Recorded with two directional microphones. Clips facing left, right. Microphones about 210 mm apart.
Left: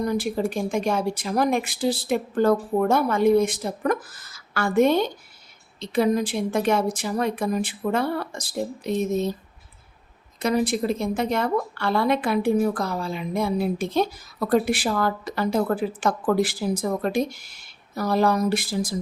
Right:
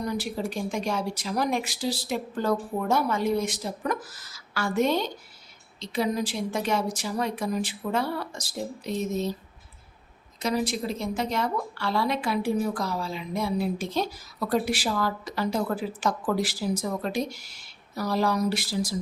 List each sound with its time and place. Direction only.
0.0 s a woman's voice: 50° left (ahead or behind)
10.4 s a woman's voice: 55° left (ahead or behind)